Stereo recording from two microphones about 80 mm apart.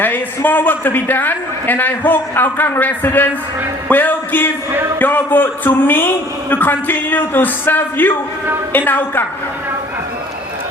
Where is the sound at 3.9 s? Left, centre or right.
Left.